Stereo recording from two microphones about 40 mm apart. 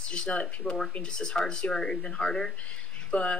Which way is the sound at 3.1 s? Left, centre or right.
Left.